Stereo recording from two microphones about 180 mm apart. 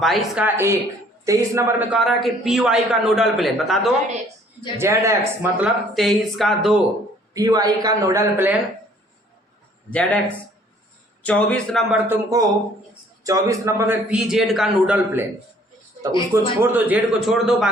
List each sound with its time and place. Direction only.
0.0 s a man's voice: centre (ahead or behind)
2.0 s speech: centre (ahead or behind)
4.8 s speech: 15° right (ahead or behind)
7.3 s a man's voice: 20° right (ahead or behind)
9.9 s speech: 5° left (ahead or behind)
11.2 s speech: 5° left (ahead or behind)
12.0 s a man's voice: 10° right (ahead or behind)
16.3 s speech: 10° right (ahead or behind)